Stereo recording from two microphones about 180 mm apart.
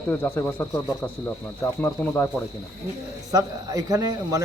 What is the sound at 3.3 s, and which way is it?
Speech, 20° right (ahead or behind).